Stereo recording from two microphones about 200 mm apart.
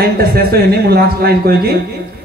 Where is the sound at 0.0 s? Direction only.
50° right (ahead or behind).